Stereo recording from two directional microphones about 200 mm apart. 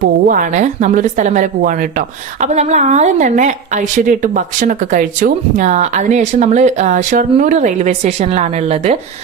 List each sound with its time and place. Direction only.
0.0 s a woman's voice: 40° right (ahead or behind)